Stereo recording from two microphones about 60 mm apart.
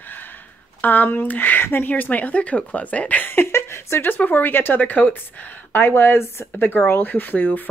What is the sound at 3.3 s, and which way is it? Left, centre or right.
Speech, left.